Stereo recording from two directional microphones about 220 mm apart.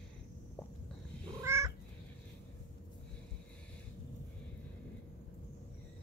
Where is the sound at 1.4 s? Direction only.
10° right (ahead or behind).